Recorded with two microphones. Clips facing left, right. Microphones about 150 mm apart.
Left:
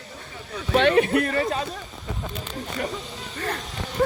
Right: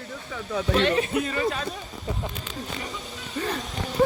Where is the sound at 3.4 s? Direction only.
10° right (ahead or behind).